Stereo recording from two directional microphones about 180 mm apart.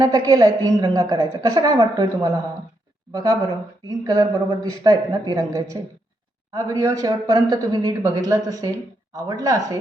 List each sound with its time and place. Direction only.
0.0 s a woman's voice: 20° right (ahead or behind)